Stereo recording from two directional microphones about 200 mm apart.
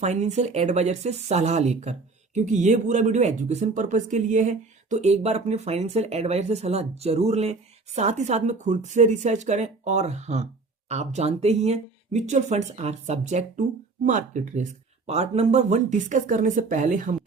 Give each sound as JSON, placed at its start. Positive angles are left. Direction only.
{"t": 0.0, "sound": "a woman's voice", "side_deg": -35}